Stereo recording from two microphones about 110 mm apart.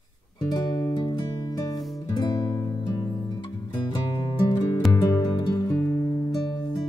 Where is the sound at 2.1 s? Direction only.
40° left (ahead or behind).